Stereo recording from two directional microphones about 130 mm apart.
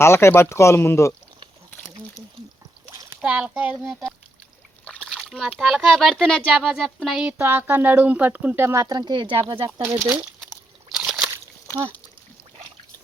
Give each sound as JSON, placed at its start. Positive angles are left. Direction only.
{"t": 0.0, "sound": "speech", "side_deg": 20}
{"t": 3.2, "sound": "speech", "side_deg": -10}
{"t": 4.9, "sound": "speech", "side_deg": 5}
{"t": 7.2, "sound": "speech", "side_deg": -15}
{"t": 9.3, "sound": "speech", "side_deg": -40}
{"t": 10.0, "sound": "crumpling", "side_deg": -5}
{"t": 10.9, "sound": "slosh", "side_deg": 0}